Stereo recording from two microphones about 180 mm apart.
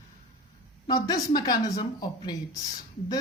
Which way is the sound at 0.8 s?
20° left (ahead or behind).